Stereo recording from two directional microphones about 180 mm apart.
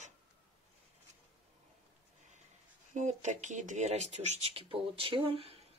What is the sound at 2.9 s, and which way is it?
Speech, 40° right (ahead or behind).